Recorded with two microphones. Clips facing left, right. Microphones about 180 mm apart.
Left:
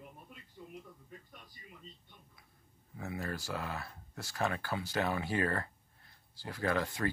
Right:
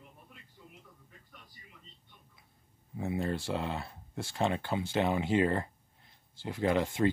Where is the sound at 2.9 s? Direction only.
25° right (ahead or behind).